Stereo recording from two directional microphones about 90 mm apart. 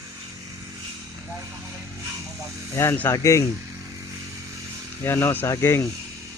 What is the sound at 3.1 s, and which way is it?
Speech, 35° left (ahead or behind).